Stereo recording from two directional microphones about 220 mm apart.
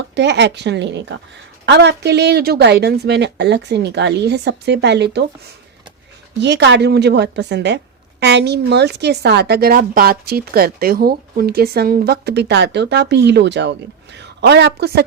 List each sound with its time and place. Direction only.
0.1 s a woman's voice: 50° right (ahead or behind)
6.4 s a woman's voice: 50° right (ahead or behind)